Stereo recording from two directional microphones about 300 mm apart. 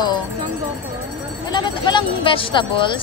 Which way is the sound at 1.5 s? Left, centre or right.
Centre.